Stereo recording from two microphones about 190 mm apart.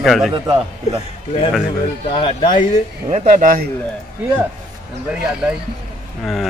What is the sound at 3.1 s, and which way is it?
Speech, 40° right (ahead or behind).